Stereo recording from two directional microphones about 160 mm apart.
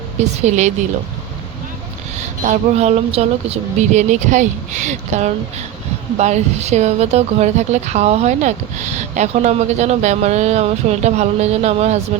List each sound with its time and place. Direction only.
0.2 s speech: 45° right (ahead or behind)
2.4 s speech: 45° right (ahead or behind)